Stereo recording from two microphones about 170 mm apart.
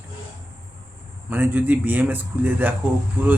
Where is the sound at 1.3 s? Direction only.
10° right (ahead or behind).